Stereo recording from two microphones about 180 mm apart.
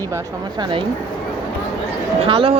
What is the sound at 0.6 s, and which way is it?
Speech, 25° right (ahead or behind).